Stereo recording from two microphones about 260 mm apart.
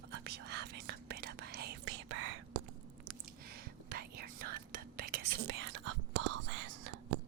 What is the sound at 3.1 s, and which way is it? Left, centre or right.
Whispering, right.